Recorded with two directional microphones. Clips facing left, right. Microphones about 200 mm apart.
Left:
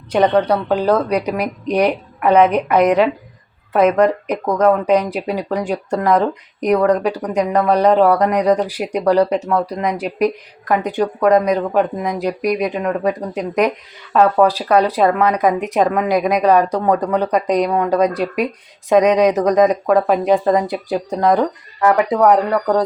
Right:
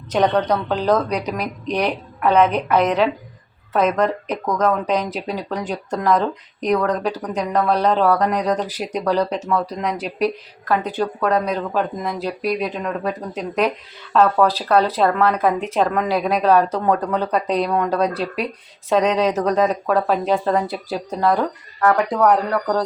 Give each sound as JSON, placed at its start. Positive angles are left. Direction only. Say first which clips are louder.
{"t": 0.1, "sound": "a woman's voice", "louder": "left 3 dB", "side_deg": 10}